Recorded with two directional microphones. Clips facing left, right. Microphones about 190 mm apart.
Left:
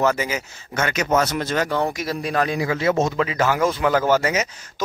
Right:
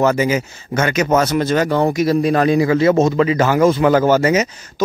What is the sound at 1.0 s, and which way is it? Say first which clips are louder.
Speech: right 4 dB; 35° right (ahead or behind).